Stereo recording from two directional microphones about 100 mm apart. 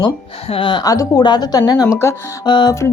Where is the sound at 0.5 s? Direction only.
55° left (ahead or behind).